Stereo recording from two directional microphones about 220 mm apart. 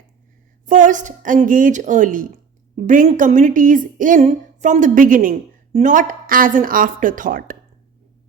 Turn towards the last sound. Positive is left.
turn(degrees=-40)  # may be behind; listen again after turning